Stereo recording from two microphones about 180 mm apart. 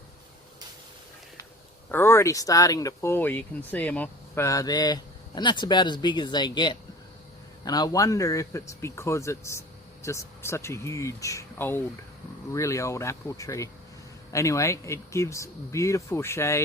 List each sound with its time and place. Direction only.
1.9 s speech: 15° left (ahead or behind)